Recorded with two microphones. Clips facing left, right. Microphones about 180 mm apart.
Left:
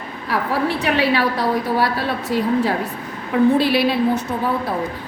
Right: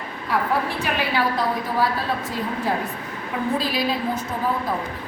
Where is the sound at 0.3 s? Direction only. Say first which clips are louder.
Left 3 dB; 70° left (ahead or behind).